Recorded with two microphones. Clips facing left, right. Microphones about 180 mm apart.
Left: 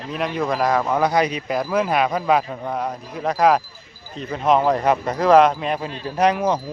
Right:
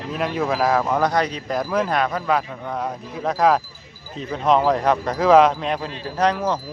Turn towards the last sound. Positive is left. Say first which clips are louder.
# left 2 dB
turn(degrees=15)  # may be behind; listen again after turning